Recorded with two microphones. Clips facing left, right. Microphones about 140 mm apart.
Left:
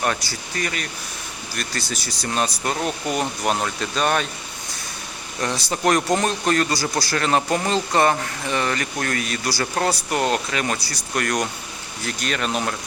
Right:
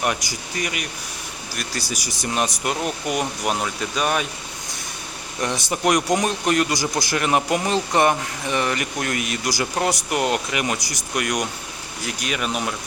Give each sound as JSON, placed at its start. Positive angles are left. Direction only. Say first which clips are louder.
{"t": 0.0, "sound": "speech", "louder": "even", "side_deg": -15}
{"t": 1.9, "sound": "speech", "louder": "even", "side_deg": -15}
{"t": 5.4, "sound": "speech", "louder": "even", "side_deg": -20}